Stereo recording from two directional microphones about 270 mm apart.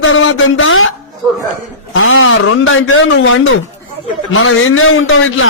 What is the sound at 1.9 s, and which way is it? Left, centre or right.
A man's voice, left.